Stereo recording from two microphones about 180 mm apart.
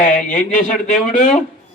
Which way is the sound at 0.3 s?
45° left (ahead or behind).